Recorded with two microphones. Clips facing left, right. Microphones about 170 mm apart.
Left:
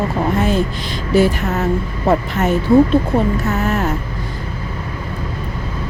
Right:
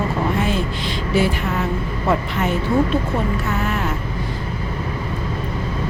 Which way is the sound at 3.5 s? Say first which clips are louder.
Left 4 dB; 40° left (ahead or behind).